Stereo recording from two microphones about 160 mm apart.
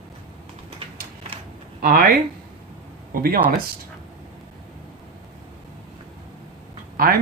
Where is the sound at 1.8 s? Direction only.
65° right (ahead or behind).